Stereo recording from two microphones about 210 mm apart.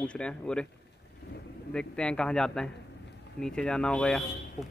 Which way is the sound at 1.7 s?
5° left (ahead or behind).